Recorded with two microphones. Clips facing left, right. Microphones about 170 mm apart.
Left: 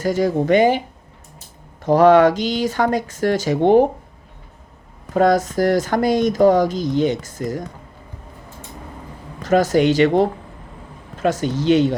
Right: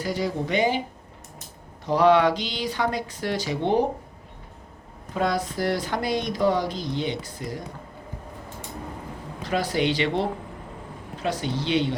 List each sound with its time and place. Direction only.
0.0 s speech: 45° left (ahead or behind)
1.8 s speech: 45° left (ahead or behind)
5.1 s speech: 45° left (ahead or behind)
9.4 s speech: 45° left (ahead or behind)